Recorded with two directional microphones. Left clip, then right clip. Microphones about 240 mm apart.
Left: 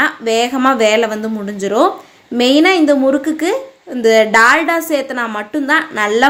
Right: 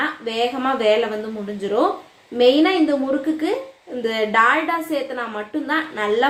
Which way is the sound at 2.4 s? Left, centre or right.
Left.